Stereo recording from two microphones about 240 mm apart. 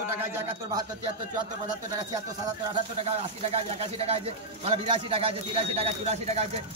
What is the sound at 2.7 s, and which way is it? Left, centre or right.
Speech, right.